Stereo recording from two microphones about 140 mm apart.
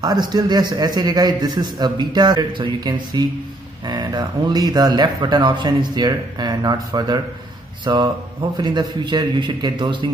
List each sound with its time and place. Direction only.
0.0 s a man's voice: 30° right (ahead or behind)